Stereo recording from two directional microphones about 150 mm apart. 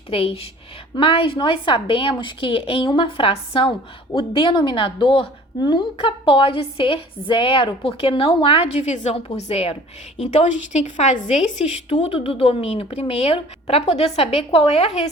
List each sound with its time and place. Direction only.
0.1 s a woman's voice: 40° left (ahead or behind)